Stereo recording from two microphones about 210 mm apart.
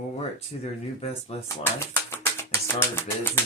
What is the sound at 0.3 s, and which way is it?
Speech, 30° left (ahead or behind).